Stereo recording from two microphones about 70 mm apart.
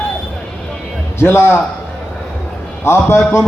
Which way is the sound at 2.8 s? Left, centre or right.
Left.